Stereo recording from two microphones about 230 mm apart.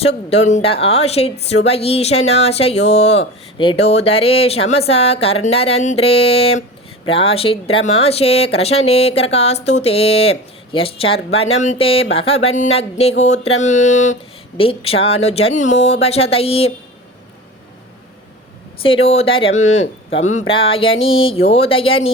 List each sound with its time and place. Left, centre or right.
0.0 s speech: left
18.8 s speech: left